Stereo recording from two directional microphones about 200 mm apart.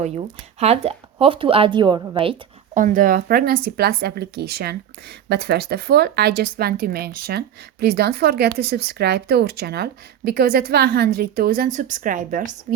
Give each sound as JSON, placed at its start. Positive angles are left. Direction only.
{"t": 0.6, "sound": "a woman's voice", "side_deg": -30}
{"t": 2.7, "sound": "speech", "side_deg": -40}